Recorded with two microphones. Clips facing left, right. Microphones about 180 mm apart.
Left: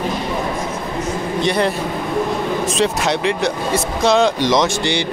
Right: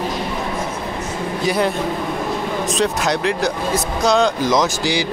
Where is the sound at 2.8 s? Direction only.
Centre (ahead or behind).